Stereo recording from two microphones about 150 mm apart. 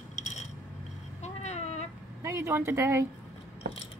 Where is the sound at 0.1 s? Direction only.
55° left (ahead or behind).